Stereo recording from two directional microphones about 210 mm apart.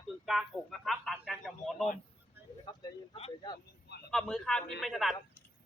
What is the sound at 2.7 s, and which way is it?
Speech, 20° left (ahead or behind).